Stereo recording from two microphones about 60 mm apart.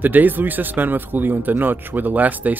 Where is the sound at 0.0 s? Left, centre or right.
Right.